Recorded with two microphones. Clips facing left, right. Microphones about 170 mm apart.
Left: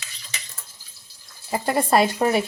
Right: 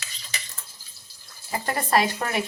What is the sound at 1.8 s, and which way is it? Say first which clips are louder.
Speech: left 4 dB; 30° left (ahead or behind).